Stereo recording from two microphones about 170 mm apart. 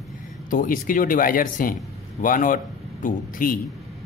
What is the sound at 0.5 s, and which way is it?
A man's voice, 55° left (ahead or behind).